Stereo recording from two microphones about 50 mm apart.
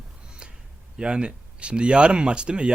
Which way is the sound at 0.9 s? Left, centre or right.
Centre.